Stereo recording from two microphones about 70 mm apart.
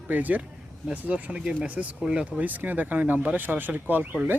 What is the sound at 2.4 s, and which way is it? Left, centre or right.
Speech, right.